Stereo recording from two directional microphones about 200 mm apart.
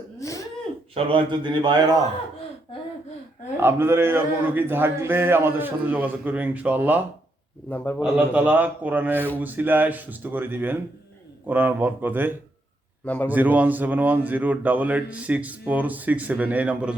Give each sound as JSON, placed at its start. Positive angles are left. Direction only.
{"t": 0.2, "sound": "throat clearing", "side_deg": 15}
{"t": 0.9, "sound": "a man's voice", "side_deg": -25}
{"t": 3.6, "sound": "speech", "side_deg": -10}
{"t": 7.7, "sound": "a man's voice", "side_deg": 10}
{"t": 8.0, "sound": "speech", "side_deg": -5}